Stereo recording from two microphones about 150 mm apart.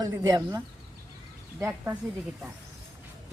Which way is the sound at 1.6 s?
15° right (ahead or behind).